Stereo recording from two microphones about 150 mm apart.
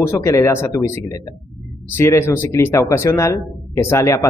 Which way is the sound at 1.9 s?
15° left (ahead or behind).